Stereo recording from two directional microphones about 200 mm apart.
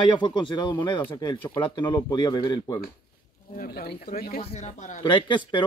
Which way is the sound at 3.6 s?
45° left (ahead or behind).